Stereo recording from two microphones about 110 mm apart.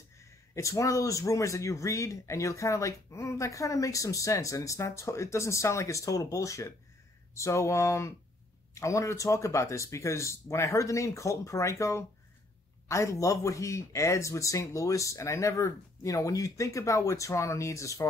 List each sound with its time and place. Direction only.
0.2 s a man's voice: 30° left (ahead or behind)